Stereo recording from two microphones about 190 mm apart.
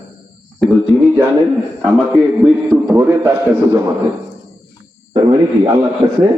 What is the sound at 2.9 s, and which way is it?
Speech, 15° right (ahead or behind).